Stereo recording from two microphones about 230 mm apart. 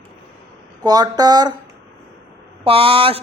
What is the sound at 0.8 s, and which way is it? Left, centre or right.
Speech, centre.